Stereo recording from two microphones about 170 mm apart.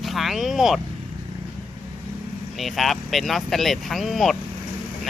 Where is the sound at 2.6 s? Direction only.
Centre (ahead or behind).